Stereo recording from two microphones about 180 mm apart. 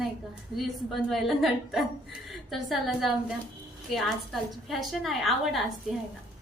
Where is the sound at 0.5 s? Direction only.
Centre (ahead or behind).